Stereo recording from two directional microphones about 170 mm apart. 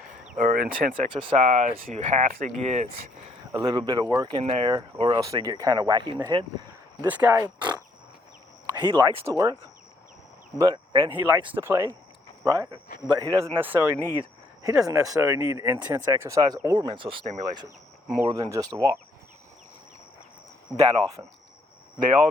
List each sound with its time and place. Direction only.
0.3 s speech: 60° right (ahead or behind)
0.9 s speech: 30° right (ahead or behind)
1.5 s speech: 45° right (ahead or behind)
3.5 s speech: 25° right (ahead or behind)
4.4 s speech: 30° right (ahead or behind)
7.0 s speech: 10° right (ahead or behind)
8.7 s speech: 25° right (ahead or behind)
10.6 s speech: 20° right (ahead or behind)
20.8 s speech: 25° right (ahead or behind)